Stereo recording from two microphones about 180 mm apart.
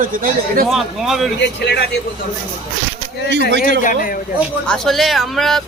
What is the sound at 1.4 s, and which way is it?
Speech, 70° left (ahead or behind).